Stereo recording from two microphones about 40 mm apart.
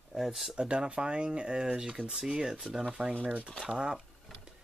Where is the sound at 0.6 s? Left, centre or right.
Right.